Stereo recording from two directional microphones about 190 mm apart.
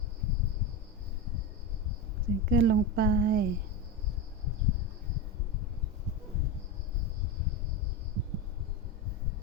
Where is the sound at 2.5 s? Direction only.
55° right (ahead or behind).